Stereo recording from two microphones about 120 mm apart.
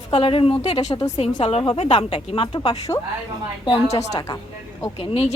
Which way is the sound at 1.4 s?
50° left (ahead or behind).